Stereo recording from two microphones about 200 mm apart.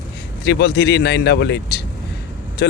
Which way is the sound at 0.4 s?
55° left (ahead or behind).